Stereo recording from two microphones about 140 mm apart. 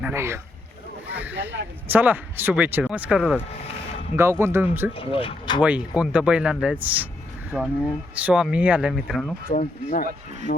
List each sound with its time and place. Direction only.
0.0 s speech: 20° right (ahead or behind)
4.1 s speech: 15° right (ahead or behind)
4.9 s speech: 40° left (ahead or behind)
5.6 s speech: 10° right (ahead or behind)
7.5 s speech: centre (ahead or behind)
9.5 s speech: 75° left (ahead or behind)